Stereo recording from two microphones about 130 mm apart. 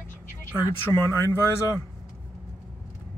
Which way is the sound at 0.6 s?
20° left (ahead or behind).